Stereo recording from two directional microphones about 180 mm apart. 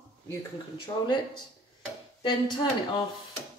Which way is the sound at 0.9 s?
15° left (ahead or behind).